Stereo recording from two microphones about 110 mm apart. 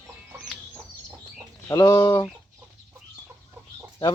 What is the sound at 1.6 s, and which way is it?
Speech, 30° left (ahead or behind).